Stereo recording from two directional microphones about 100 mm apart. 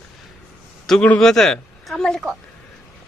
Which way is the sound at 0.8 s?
10° left (ahead or behind).